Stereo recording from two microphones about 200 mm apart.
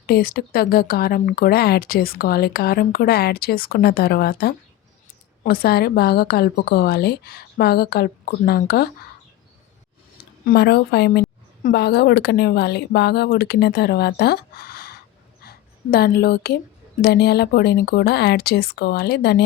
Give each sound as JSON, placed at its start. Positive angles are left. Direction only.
{"t": 0.0, "sound": "speech", "side_deg": 50}
{"t": 10.4, "sound": "a woman's voice", "side_deg": 55}